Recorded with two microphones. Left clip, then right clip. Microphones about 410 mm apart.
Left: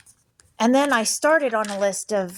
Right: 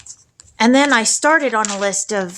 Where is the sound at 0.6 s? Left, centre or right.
Left.